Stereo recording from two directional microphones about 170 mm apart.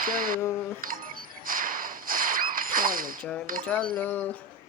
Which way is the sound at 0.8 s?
55° right (ahead or behind).